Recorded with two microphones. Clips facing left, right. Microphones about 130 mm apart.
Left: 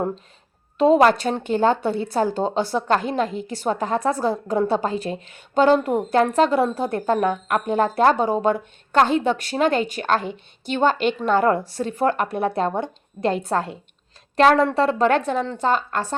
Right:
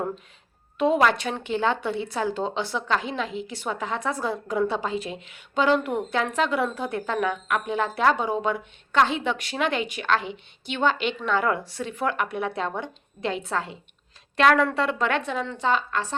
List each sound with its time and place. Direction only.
0.8 s speech: 35° left (ahead or behind)
14.3 s speech: 35° left (ahead or behind)